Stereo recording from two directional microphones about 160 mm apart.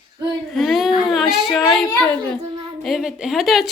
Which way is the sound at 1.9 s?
15° left (ahead or behind).